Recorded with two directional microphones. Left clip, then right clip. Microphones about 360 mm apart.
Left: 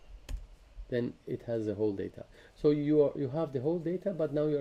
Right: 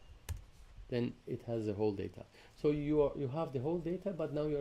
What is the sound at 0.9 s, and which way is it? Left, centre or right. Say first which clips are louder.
Speech: left 4 dB; centre.